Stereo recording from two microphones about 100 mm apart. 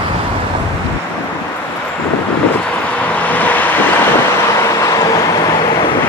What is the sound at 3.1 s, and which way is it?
Vehicle, 15° left (ahead or behind).